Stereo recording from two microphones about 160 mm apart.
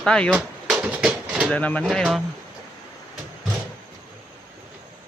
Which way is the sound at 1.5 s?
10° left (ahead or behind).